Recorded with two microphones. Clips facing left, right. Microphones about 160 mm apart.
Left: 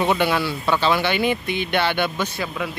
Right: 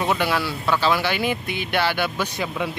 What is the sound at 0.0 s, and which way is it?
Speech, centre (ahead or behind).